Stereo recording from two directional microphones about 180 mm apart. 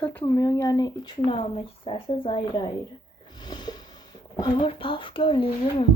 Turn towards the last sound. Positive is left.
turn(degrees=30)  # may be behind; listen again after turning